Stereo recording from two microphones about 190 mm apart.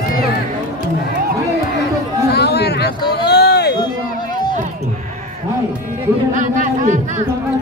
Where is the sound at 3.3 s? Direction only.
60° left (ahead or behind).